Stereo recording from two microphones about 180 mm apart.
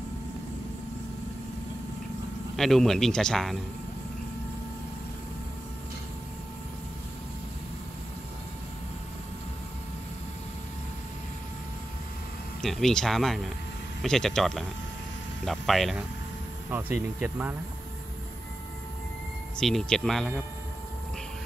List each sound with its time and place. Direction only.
2.5 s speech: centre (ahead or behind)
12.6 s speech: centre (ahead or behind)
16.7 s speech: 10° right (ahead or behind)
19.6 s speech: 5° left (ahead or behind)